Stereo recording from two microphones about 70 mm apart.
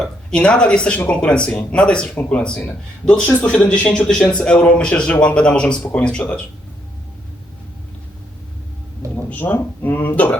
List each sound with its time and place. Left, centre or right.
0.0 s a man's voice: centre
9.3 s speech: left